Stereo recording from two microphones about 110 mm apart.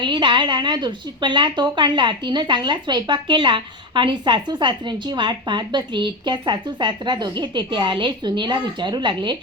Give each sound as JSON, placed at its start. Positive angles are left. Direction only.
{"t": 0.0, "sound": "speech", "side_deg": -45}